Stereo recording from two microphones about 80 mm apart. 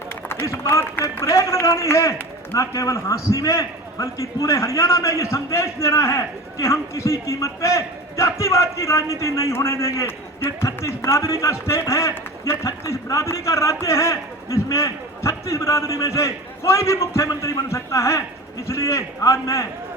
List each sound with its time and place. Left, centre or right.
0.3 s a man's voice: left